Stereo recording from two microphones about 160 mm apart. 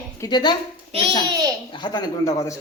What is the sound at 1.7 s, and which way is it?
Speech, 30° left (ahead or behind).